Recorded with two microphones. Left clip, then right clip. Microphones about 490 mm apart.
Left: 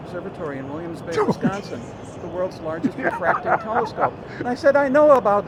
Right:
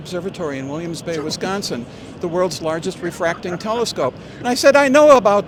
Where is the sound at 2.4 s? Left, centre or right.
Right.